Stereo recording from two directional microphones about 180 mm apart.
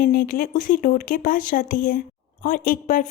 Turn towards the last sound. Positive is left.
turn(degrees=50)  # may be behind; listen again after turning